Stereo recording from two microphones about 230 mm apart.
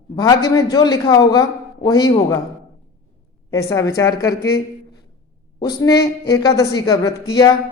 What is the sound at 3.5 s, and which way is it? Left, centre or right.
Speech, centre.